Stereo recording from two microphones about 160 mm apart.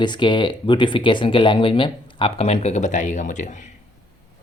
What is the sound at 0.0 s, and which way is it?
Speech, 30° left (ahead or behind).